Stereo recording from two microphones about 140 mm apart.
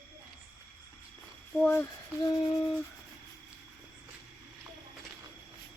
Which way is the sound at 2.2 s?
30° left (ahead or behind).